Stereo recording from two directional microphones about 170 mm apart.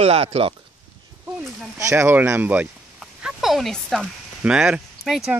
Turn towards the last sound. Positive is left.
turn(degrees=0)  # may be behind; listen again after turning